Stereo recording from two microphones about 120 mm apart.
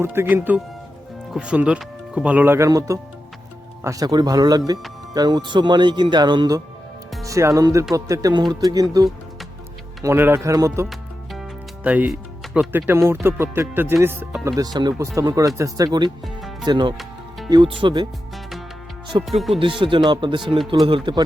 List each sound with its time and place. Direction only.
0.0 s speech: 20° right (ahead or behind); by 6.6 s 40° right (ahead or behind)
7.3 s speech: 25° right (ahead or behind)
10.8 s music: centre (ahead or behind)
11.8 s speech: 10° right (ahead or behind)
14.4 s speech: 30° right (ahead or behind)
16.0 s music: centre (ahead or behind)
16.6 s speech: 40° right (ahead or behind)
17.0 s music: centre (ahead or behind)
17.5 s speech: 45° right (ahead or behind)
19.1 s speech: 45° right (ahead or behind)